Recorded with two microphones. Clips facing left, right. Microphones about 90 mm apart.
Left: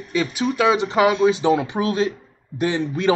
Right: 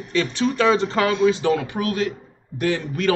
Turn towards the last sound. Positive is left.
turn(degrees=20)  # may be behind; listen again after turning